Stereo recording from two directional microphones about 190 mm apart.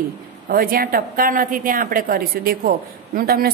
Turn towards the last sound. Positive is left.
turn(degrees=-50)  # may be behind; listen again after turning